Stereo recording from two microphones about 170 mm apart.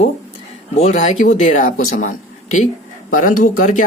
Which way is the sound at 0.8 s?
40° left (ahead or behind).